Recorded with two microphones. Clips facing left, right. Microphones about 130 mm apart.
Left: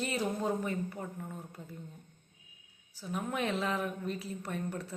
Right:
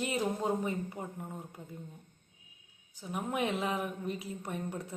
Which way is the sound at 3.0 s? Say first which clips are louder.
Right 1 dB; 20° right (ahead or behind).